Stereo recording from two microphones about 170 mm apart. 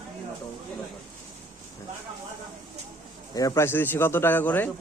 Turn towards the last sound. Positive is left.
turn(degrees=10)  # may be behind; listen again after turning